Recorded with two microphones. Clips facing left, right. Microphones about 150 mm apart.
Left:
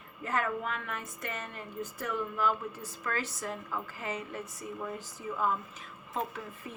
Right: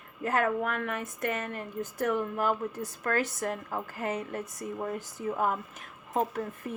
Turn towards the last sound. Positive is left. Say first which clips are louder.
# right 7 dB
turn(degrees=-50)  # may be behind; listen again after turning